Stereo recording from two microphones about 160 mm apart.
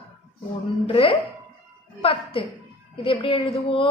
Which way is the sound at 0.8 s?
35° left (ahead or behind).